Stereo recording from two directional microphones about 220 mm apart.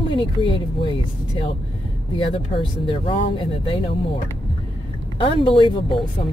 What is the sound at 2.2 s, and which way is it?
Speech, 20° left (ahead or behind).